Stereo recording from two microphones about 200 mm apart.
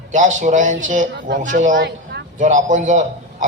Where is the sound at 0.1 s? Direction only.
40° right (ahead or behind).